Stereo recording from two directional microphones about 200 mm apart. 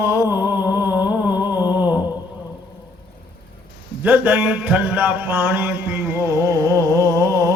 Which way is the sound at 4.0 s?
10° right (ahead or behind).